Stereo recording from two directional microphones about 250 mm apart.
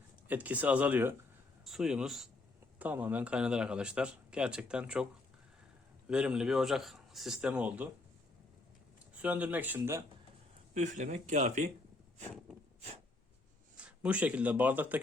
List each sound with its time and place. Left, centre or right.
0.3 s speech: centre
6.1 s speech: centre
9.2 s speech: centre
10.8 s speech: right
13.7 s speech: centre